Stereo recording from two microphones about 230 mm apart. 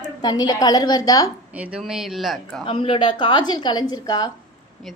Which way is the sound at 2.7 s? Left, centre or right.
Left.